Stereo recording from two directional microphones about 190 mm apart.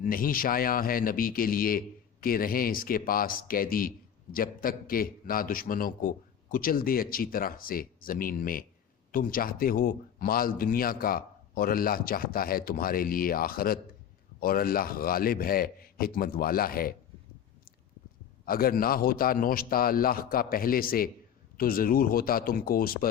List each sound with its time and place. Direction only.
0.0 s speech: 50° left (ahead or behind)
18.4 s speech: 50° left (ahead or behind)